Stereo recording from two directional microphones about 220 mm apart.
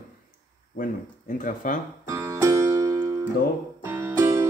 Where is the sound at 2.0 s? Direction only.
15° right (ahead or behind).